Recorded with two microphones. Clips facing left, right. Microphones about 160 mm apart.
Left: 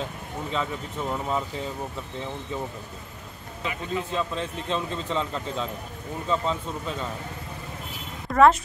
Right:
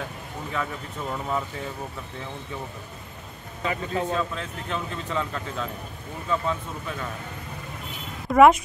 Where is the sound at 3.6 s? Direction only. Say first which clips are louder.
Right 3 dB; 45° right (ahead or behind).